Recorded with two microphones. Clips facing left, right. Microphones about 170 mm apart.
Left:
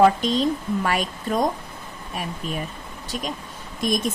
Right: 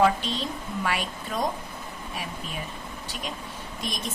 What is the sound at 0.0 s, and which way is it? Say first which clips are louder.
A woman's voice: left 6 dB; 40° left (ahead or behind).